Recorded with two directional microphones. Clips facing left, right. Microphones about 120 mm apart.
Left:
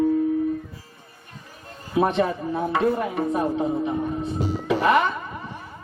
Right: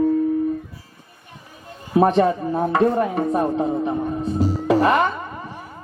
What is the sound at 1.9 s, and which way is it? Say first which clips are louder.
Speech: right 5 dB; 40° right (ahead or behind).